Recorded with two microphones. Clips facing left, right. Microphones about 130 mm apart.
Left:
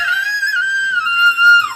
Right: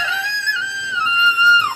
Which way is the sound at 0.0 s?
25° right (ahead or behind).